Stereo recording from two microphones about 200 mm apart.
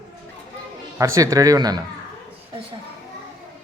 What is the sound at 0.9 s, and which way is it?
Speech, 15° right (ahead or behind).